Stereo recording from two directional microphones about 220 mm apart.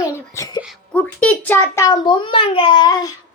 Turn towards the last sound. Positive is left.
turn(degrees=15)  # may be behind; listen again after turning